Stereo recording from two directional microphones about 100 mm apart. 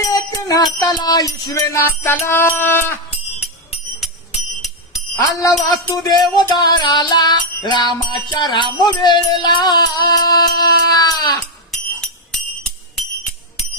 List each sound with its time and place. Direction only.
0.1 s music: 40° left (ahead or behind)
1.8 s music: 20° left (ahead or behind)
5.4 s a sound: 35° left (ahead or behind)
6.0 s music: 40° left (ahead or behind)
11.7 s music: 5° left (ahead or behind)